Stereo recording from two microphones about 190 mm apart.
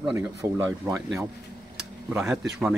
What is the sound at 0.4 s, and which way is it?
Speech, 15° right (ahead or behind).